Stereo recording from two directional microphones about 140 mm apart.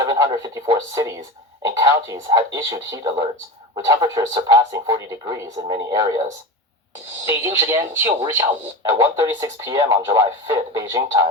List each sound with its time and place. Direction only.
0.0 s speech: 25° right (ahead or behind)
7.3 s speech: 20° right (ahead or behind)